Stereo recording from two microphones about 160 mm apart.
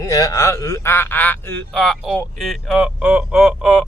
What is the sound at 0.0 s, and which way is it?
Speech, 20° left (ahead or behind).